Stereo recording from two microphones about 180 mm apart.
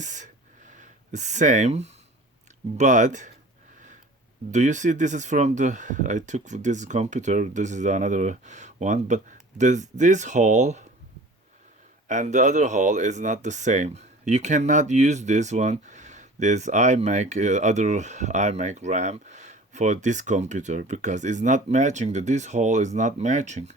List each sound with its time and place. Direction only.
0.0 s a sound: 45° right (ahead or behind)
2.7 s speech: 45° right (ahead or behind)
4.5 s speech: 45° right (ahead or behind)
12.0 s speech: 45° right (ahead or behind)